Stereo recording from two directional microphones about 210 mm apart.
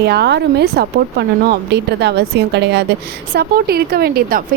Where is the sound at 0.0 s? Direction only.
50° right (ahead or behind).